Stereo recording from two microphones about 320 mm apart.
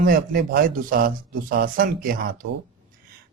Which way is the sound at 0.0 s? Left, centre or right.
Right.